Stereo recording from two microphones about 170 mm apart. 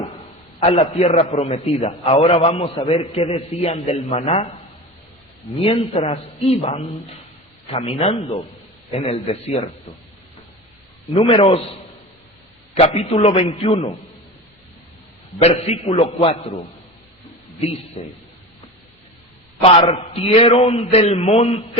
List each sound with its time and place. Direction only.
0.6 s a man's voice: 35° left (ahead or behind)
5.5 s a man's voice: 30° left (ahead or behind)
11.1 s a man's voice: 30° left (ahead or behind)
12.8 s a man's voice: 35° left (ahead or behind)
15.4 s a man's voice: 35° left (ahead or behind)
17.6 s a man's voice: 35° left (ahead or behind)
19.6 s a man's voice: 35° left (ahead or behind)